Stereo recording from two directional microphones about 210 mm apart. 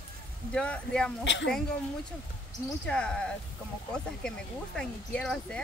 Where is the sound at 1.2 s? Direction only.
60° left (ahead or behind).